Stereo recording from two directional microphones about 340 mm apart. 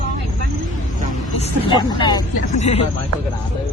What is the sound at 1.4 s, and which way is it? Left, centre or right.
Speech, centre.